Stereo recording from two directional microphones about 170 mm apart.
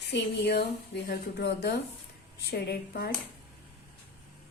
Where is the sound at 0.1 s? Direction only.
80° left.